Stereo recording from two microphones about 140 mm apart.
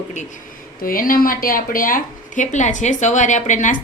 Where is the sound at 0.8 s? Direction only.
90° left.